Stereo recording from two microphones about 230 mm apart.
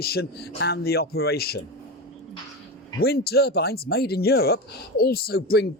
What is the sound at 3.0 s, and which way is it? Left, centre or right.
Speech, left.